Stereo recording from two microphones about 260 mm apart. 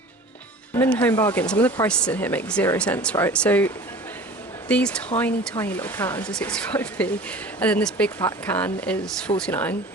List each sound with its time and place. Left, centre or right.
0.8 s speech: centre
4.7 s speech: centre